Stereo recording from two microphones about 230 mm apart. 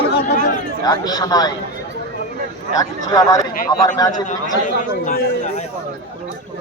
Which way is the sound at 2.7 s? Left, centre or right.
Centre.